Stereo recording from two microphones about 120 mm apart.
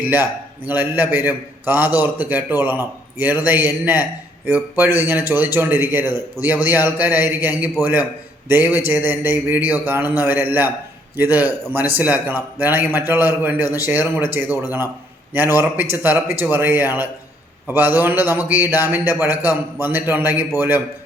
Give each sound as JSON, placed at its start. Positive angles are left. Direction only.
{"t": 0.0, "sound": "a man's voice", "side_deg": -15}